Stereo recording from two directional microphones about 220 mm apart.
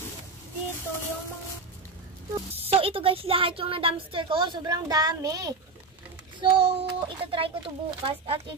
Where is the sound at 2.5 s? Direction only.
25° right (ahead or behind).